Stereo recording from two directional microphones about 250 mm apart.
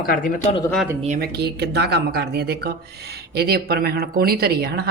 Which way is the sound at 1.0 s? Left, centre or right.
Right.